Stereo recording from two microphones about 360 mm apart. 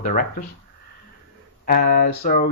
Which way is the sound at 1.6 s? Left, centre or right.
Left.